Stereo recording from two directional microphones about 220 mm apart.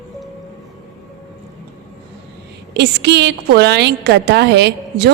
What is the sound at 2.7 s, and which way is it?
A woman's voice, 50° right (ahead or behind).